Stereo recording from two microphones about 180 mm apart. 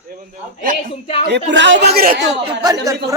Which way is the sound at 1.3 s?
85° right.